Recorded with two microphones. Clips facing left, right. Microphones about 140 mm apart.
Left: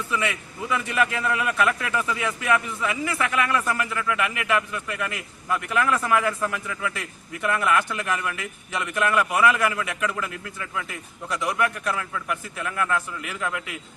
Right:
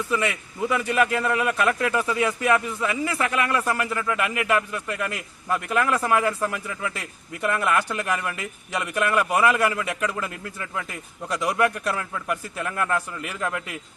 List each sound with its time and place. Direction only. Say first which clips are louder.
0.1 s a man's voice: even; 35° right (ahead or behind)